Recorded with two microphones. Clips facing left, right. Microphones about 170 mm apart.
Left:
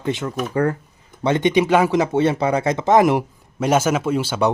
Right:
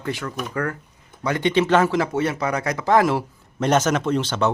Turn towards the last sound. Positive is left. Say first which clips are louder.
# left 2 dB
turn(degrees=10)  # may be behind; listen again after turning